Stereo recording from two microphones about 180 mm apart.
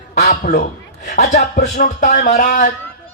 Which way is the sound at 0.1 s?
45° left (ahead or behind).